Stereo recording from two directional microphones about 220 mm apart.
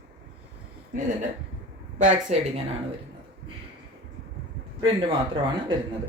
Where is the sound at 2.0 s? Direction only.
35° right (ahead or behind).